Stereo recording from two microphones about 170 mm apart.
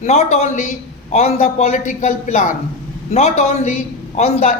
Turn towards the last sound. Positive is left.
turn(degrees=35)  # may be behind; listen again after turning